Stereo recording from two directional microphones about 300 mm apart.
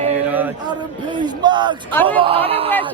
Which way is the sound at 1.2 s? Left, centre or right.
Centre.